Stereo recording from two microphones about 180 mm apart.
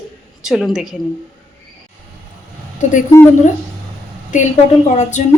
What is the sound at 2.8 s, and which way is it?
Speech, 45° left (ahead or behind).